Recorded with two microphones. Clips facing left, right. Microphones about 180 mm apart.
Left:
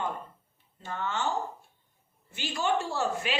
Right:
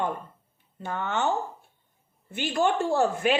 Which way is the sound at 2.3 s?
55° right (ahead or behind).